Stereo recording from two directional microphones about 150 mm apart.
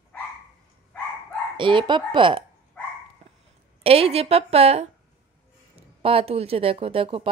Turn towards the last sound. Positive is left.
turn(degrees=-40)  # may be behind; listen again after turning